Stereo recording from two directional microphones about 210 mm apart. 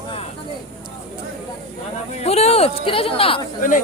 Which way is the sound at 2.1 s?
30° left (ahead or behind).